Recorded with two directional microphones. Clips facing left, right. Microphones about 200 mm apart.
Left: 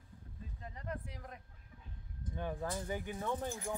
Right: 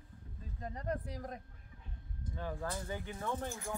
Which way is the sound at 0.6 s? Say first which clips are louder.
Right 6 dB; 40° right (ahead or behind).